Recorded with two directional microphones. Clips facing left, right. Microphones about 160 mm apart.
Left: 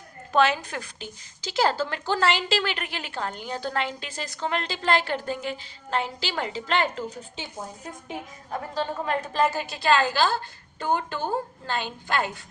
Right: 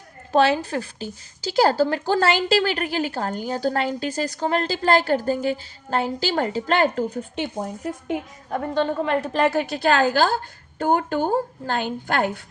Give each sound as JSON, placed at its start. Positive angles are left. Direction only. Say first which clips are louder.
{"t": 0.3, "sound": "speech", "louder": "right 4 dB", "side_deg": -35}
{"t": 9.0, "sound": "a woman's voice", "louder": "right 4 dB", "side_deg": -70}
{"t": 10.1, "sound": "a woman's voice", "louder": "right 4 dB", "side_deg": -45}